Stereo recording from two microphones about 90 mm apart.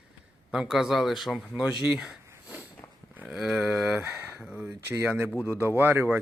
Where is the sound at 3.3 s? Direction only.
5° right (ahead or behind).